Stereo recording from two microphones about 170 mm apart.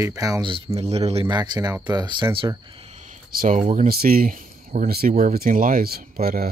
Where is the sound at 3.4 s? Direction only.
45° right (ahead or behind).